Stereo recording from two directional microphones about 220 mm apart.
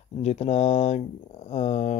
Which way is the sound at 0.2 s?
30° left (ahead or behind).